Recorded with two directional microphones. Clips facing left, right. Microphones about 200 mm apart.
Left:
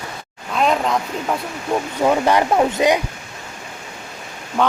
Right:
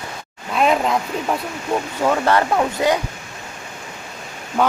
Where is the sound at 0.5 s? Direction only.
5° right (ahead or behind).